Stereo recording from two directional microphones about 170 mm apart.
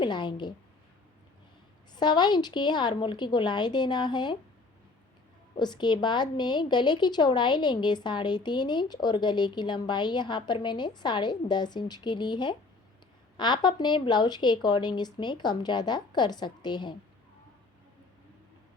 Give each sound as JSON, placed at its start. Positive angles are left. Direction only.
{"t": 0.0, "sound": "a woman's voice", "side_deg": 25}
{"t": 2.0, "sound": "a woman's voice", "side_deg": 25}
{"t": 5.5, "sound": "a woman's voice", "side_deg": 25}